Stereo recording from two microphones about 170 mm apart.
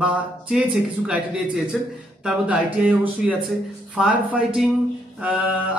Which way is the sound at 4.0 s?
5° right (ahead or behind).